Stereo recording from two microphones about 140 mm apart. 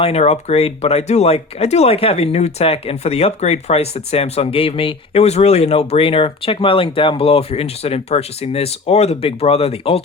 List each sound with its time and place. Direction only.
0.0 s speech: 50° left (ahead or behind)